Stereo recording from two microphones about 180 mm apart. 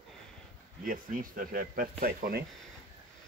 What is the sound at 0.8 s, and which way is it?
Speech, 50° right (ahead or behind).